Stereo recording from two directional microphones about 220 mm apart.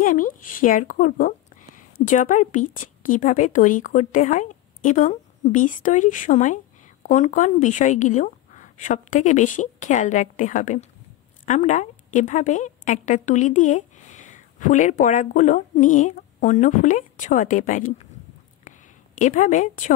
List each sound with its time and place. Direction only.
0.0 s a woman's voice: 35° left (ahead or behind)
19.1 s speech: 35° left (ahead or behind)